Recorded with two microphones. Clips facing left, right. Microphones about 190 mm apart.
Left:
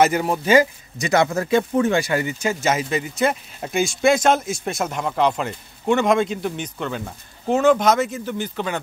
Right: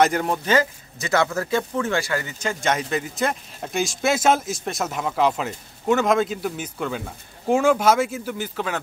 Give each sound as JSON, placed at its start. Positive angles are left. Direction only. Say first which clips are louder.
{"t": 0.0, "sound": "speech", "louder": "left 2 dB", "side_deg": 5}